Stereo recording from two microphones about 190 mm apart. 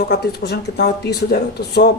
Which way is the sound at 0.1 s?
60° left (ahead or behind).